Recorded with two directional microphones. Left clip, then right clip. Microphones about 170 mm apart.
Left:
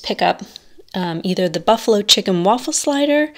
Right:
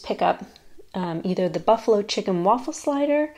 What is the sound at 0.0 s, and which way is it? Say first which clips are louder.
Speech: left 5 dB; 30° left (ahead or behind).